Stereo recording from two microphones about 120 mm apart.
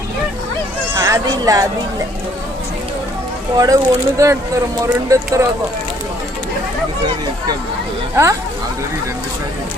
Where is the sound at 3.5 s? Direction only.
30° right (ahead or behind).